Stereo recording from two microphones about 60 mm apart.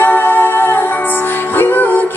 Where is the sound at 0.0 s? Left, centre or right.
Left.